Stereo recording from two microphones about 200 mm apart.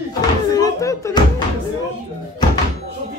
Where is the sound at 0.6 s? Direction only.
15° left (ahead or behind).